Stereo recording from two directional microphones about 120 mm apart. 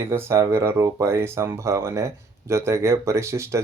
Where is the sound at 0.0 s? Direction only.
20° right (ahead or behind).